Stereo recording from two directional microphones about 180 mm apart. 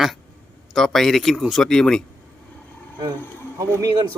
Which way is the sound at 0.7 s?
Centre (ahead or behind).